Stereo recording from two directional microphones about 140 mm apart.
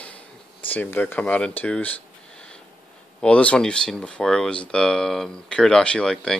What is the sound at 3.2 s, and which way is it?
Speech, 10° left (ahead or behind).